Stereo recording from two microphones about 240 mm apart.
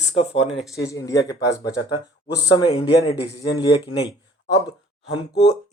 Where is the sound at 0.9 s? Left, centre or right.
Centre.